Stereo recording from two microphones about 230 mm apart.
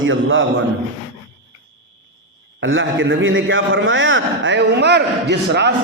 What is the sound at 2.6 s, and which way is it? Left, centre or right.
A man's voice, right.